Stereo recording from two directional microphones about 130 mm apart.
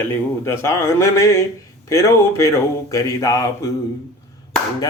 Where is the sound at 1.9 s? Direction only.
20° left (ahead or behind).